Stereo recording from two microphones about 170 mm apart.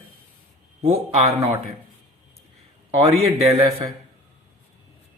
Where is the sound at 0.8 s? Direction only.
40° right (ahead or behind).